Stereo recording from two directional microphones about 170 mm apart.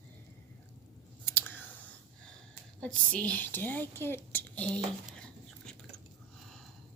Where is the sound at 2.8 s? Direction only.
5° left (ahead or behind).